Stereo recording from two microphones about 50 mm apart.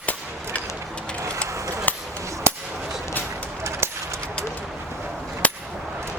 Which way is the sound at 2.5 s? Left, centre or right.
Right.